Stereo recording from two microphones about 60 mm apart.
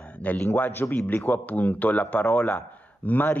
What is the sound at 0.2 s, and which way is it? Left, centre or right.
Speech, left.